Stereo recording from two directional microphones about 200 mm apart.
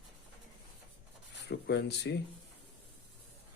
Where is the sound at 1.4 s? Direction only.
55° left (ahead or behind).